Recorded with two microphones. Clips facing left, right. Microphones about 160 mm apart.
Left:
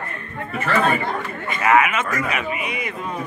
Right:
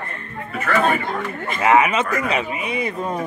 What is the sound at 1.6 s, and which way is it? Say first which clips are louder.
Speech: right 2 dB; 25° right (ahead or behind).